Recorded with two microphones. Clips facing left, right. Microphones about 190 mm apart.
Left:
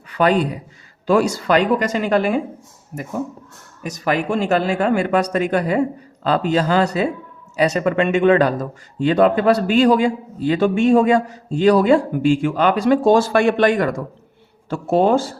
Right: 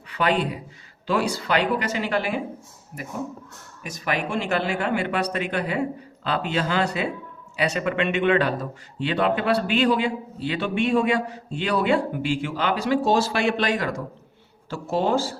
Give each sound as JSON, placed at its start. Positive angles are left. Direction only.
{"t": 0.2, "sound": "speech", "side_deg": 45}